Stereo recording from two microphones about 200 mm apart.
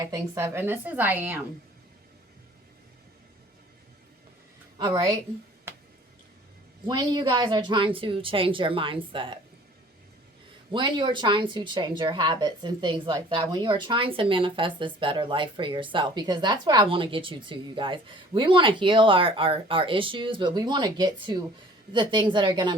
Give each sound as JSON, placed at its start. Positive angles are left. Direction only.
{"t": 0.0, "sound": "a woman's voice", "side_deg": -15}
{"t": 4.8, "sound": "a woman's voice", "side_deg": -15}
{"t": 6.8, "sound": "a woman's voice", "side_deg": -20}
{"t": 10.7, "sound": "a woman's voice", "side_deg": -25}